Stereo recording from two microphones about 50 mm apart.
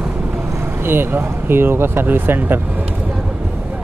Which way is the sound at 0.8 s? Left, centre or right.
Right.